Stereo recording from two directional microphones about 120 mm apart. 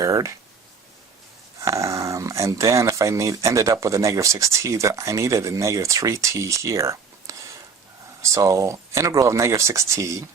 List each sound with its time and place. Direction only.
0.0 s speech: 30° right (ahead or behind)
1.6 s speech: 25° right (ahead or behind)